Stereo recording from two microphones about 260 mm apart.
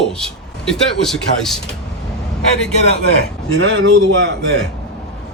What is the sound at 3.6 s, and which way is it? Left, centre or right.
Speech, right.